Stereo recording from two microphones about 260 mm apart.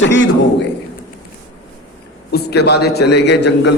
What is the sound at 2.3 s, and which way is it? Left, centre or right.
A man's voice, left.